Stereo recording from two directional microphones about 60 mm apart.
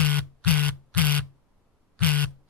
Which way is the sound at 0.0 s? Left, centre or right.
Left.